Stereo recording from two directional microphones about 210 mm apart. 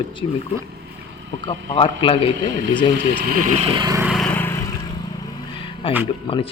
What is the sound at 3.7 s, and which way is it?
Speech, 20° right (ahead or behind).